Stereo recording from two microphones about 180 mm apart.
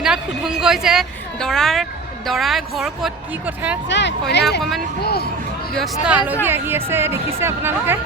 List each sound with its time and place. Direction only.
0.0 s a woman's voice: 5° right (ahead or behind)
3.8 s speech: 75° left (ahead or behind)
5.0 s speech: 60° left (ahead or behind)
5.7 s a woman's voice: centre (ahead or behind)